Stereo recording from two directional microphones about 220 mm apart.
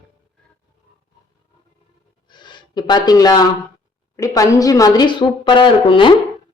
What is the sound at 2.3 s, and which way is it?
A woman's voice, 20° left (ahead or behind).